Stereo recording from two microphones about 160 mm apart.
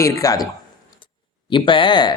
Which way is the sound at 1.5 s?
30° left (ahead or behind).